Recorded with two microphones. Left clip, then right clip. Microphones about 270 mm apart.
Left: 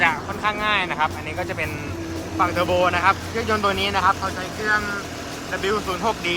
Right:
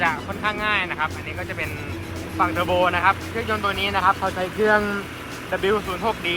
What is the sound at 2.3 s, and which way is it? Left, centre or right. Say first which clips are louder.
Speech: left 1 dB; centre.